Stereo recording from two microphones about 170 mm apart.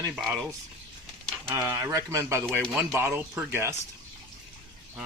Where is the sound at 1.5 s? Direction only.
15° right (ahead or behind).